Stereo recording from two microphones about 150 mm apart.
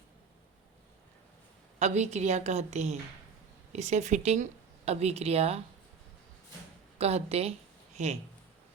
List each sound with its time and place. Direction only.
1.8 s a woman's voice: 50° right (ahead or behind)
7.0 s a woman's voice: 45° right (ahead or behind)